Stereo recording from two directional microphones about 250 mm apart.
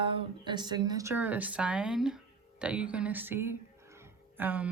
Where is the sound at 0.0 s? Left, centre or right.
Right.